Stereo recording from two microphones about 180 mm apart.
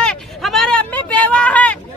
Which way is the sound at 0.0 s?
5° left (ahead or behind).